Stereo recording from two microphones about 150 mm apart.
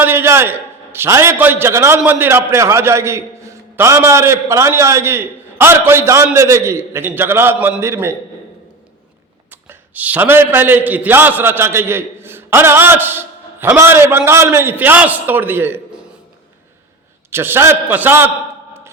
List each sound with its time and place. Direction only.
0.0 s a man's voice: 15° right (ahead or behind)
9.5 s a man's voice: 10° right (ahead or behind)
17.3 s a man's voice: 15° right (ahead or behind)